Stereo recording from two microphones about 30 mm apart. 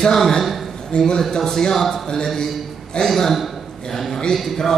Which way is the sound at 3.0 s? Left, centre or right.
Left.